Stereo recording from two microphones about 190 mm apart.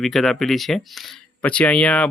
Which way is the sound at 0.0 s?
Centre (ahead or behind).